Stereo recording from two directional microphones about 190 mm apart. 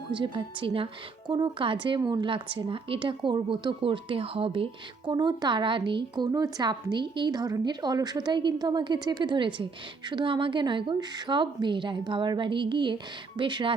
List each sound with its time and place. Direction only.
0.1 s speech: 25° right (ahead or behind)